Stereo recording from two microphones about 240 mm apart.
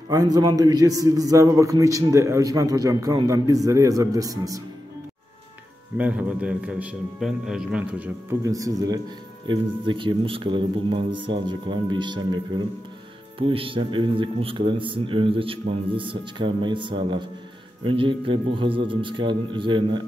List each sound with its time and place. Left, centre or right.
0.1 s a man's voice: centre
5.9 s a man's voice: centre